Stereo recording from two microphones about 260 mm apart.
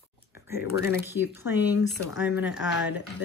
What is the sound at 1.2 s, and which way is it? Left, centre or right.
Speech, centre.